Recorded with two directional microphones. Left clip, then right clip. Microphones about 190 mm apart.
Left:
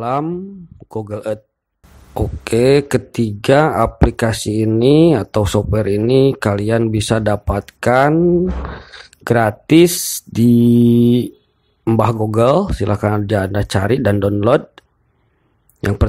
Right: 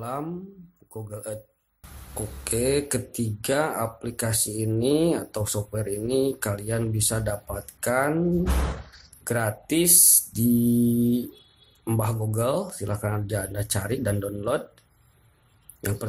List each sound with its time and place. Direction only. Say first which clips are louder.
0.0 s speech: left 13 dB; 40° left (ahead or behind)